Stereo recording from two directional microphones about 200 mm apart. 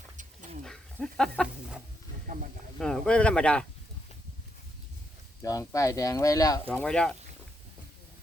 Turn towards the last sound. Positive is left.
turn(degrees=5)  # may be behind; listen again after turning